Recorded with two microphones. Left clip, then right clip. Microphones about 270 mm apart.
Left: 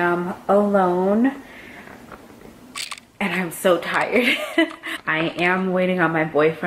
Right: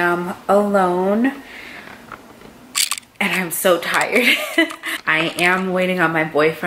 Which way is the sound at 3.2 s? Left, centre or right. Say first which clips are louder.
Right 4 dB; centre.